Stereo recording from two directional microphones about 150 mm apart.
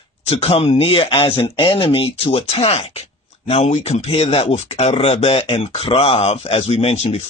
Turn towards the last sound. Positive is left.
turn(degrees=45)  # may be behind; listen again after turning